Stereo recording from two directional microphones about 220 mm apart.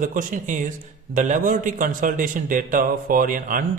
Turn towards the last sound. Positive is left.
turn(degrees=-40)  # may be behind; listen again after turning